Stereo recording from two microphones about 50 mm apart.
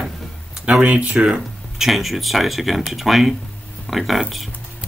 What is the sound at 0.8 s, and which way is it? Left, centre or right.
Speech, right.